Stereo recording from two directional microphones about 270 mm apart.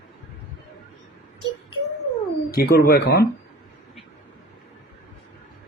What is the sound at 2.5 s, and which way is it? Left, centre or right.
Speech, left.